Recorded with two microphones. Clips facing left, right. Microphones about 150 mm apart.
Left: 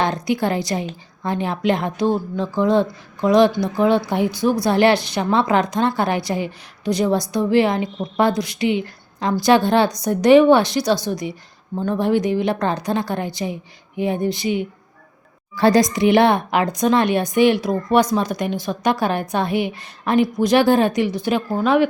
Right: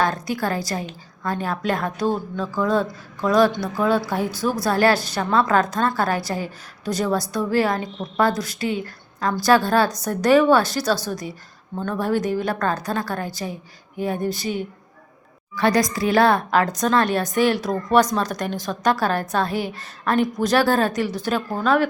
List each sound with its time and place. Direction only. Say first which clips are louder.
0.0 s a woman's voice: left 3 dB; 20° left (ahead or behind)
15.5 s speech: left 4 dB; 30° left (ahead or behind)